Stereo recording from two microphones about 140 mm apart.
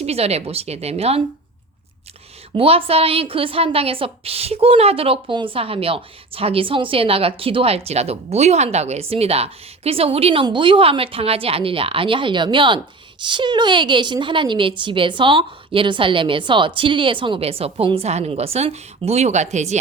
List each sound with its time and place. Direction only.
0.0 s a woman's voice: 45° right (ahead or behind)
2.6 s a woman's voice: 45° right (ahead or behind)